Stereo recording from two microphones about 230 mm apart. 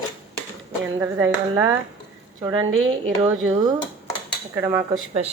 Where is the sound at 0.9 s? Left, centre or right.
Centre.